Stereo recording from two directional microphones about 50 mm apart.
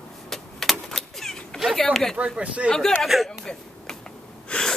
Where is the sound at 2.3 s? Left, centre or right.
Right.